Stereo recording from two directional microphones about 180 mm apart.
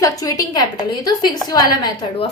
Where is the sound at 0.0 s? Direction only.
20° left (ahead or behind).